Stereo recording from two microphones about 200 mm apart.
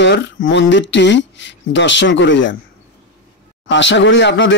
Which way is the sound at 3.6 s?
65° left (ahead or behind).